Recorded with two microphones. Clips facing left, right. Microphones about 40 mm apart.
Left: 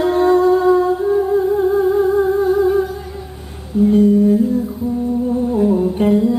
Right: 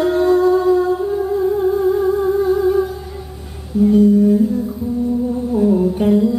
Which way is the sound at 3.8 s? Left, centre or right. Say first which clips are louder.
Even; left.